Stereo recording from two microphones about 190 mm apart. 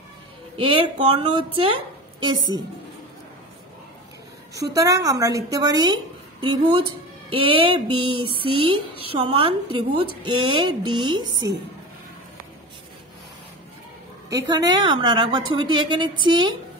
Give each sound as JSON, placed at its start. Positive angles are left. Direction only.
{"t": 0.6, "sound": "speech", "side_deg": -25}
{"t": 4.6, "sound": "speech", "side_deg": -20}
{"t": 14.3, "sound": "speech", "side_deg": -20}